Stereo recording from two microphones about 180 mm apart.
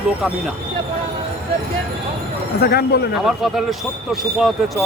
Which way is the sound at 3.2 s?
Centre (ahead or behind).